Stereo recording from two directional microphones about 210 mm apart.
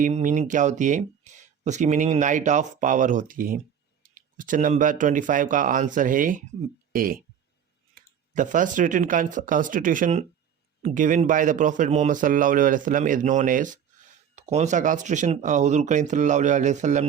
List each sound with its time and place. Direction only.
0.0 s speech: 35° right (ahead or behind)
8.3 s speech: 40° right (ahead or behind)